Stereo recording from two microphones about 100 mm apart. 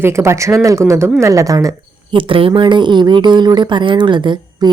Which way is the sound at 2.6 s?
50° right (ahead or behind).